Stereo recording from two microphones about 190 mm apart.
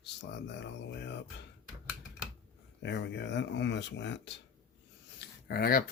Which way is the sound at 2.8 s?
70° left (ahead or behind).